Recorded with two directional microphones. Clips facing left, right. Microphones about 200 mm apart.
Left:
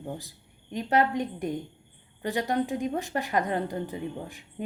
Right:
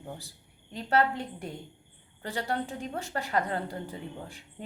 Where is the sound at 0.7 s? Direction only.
15° left (ahead or behind).